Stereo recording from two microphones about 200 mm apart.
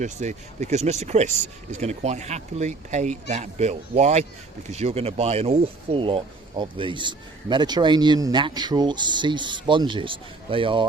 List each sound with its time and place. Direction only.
0.0 s speech: 35° right (ahead or behind)